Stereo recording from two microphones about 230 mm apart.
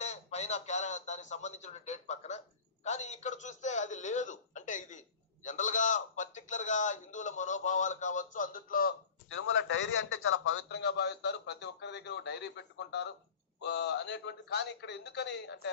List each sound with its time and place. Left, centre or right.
0.0 s a man's voice: left
9.3 s a man's voice: left
10.8 s a man's voice: left